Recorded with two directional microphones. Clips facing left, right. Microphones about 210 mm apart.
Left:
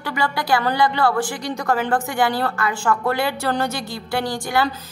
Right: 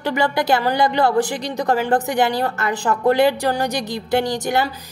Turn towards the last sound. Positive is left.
turn(degrees=-20)  # may be behind; listen again after turning